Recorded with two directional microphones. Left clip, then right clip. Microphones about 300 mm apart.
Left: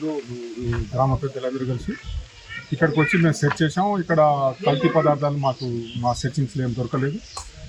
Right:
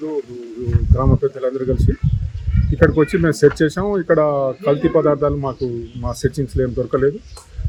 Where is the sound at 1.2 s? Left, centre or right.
Centre.